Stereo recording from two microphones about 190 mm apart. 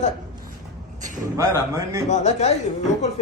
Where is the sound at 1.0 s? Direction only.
40° right (ahead or behind).